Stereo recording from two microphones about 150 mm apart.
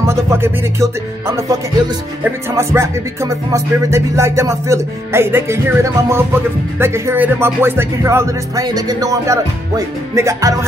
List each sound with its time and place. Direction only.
0.0 s music: 15° right (ahead or behind)
2.2 s speech: 20° right (ahead or behind)